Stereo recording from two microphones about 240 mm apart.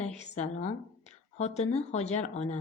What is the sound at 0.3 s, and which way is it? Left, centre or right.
Speech, left.